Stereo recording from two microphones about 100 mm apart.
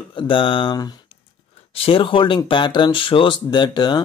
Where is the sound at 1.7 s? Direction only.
65° left (ahead or behind); by 4.0 s 45° left (ahead or behind).